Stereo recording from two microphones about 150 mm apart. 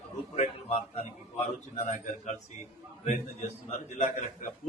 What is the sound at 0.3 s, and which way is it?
A man's voice, 50° left (ahead or behind).